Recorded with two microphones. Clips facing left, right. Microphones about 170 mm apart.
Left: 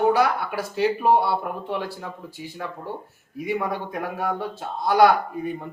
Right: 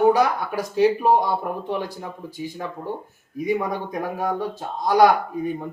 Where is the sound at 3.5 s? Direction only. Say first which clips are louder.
Right 2 dB; 15° right (ahead or behind).